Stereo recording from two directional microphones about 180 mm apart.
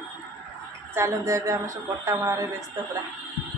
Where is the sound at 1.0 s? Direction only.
15° right (ahead or behind).